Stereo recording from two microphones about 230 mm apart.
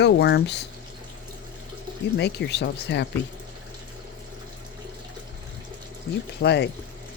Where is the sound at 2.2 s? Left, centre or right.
Left.